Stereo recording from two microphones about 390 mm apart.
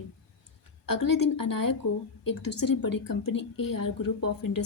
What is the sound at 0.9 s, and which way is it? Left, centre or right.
A woman's voice, left.